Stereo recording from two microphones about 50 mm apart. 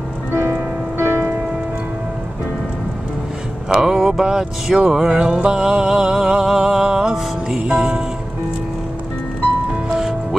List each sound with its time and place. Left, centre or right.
0.4 s music: right
3.6 s music: centre